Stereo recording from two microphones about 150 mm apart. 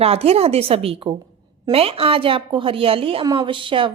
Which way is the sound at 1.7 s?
40° right (ahead or behind).